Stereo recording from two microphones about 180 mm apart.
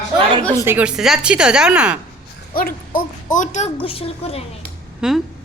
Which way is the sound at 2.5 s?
50° left (ahead or behind).